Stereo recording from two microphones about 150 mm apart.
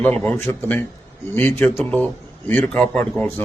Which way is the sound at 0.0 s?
10° left (ahead or behind).